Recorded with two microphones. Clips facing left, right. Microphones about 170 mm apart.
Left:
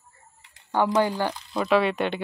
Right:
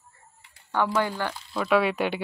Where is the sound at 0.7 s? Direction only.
15° left (ahead or behind).